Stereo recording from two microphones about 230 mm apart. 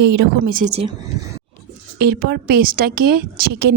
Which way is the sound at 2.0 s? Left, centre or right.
Right.